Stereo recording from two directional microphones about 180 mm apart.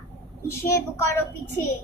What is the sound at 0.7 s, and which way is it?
Speech, 15° left (ahead or behind).